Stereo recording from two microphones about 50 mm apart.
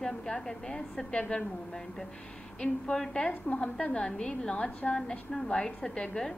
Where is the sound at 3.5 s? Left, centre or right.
Left.